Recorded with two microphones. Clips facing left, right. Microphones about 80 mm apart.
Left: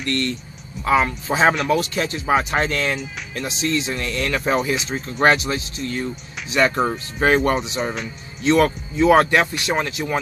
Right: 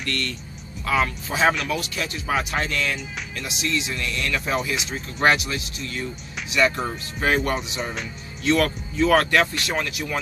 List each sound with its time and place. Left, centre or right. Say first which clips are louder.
0.0 s speech: left 5 dB; left